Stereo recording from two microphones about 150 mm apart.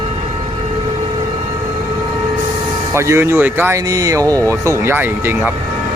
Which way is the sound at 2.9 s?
20° right (ahead or behind).